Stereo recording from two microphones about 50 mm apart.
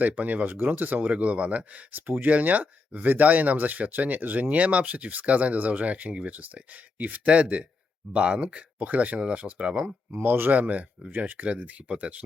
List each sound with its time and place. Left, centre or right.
0.0 s speech: right
1.9 s speech: right
8.1 s speech: right
10.1 s speech: right